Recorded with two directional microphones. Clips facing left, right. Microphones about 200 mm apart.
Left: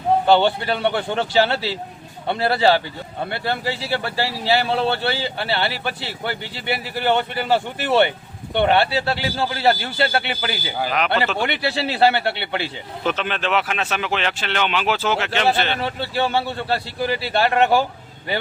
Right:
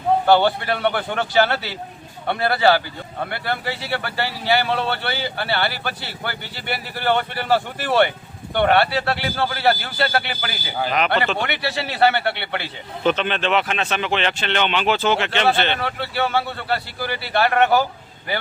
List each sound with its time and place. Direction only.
0.3 s speech: 25° left (ahead or behind)
10.8 s speech: centre (ahead or behind)
11.4 s speech: 30° left (ahead or behind)
13.1 s speech: centre (ahead or behind)
15.8 s speech: 30° left (ahead or behind)